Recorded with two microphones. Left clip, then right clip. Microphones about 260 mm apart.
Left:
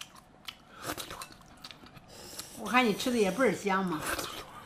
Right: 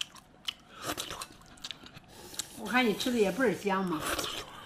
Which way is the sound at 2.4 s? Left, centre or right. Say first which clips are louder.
Right 7 dB; centre.